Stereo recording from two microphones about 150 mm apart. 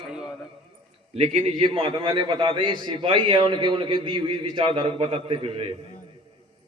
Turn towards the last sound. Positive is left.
turn(degrees=-40)  # may be behind; listen again after turning